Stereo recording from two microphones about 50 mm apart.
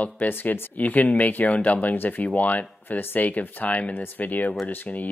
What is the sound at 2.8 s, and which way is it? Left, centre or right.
Speech, left.